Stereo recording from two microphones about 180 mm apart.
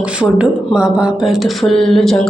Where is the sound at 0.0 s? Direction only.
5° right (ahead or behind).